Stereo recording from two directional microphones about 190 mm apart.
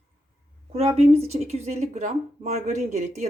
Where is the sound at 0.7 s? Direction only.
35° right (ahead or behind).